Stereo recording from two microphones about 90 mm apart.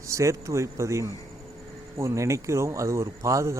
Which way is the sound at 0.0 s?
35° right (ahead or behind).